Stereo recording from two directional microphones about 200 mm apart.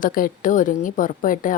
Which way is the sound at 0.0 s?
45° left (ahead or behind).